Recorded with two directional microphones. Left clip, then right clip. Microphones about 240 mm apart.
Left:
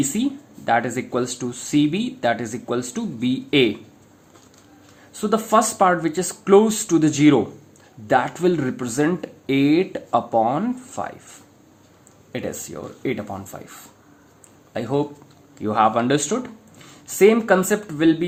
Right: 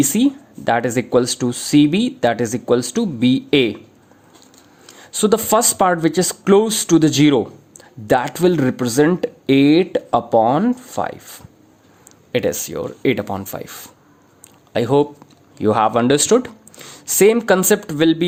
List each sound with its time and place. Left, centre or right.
0.0 s speech: right
4.9 s speech: right